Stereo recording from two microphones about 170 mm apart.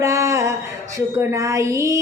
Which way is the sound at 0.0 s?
20° right (ahead or behind).